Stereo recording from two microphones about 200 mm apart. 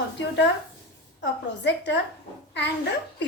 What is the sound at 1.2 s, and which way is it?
A woman's voice, 65° left (ahead or behind).